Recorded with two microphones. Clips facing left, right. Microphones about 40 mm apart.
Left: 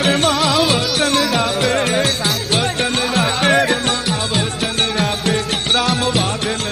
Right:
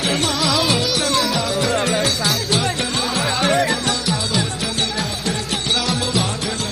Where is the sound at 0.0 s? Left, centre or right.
Left.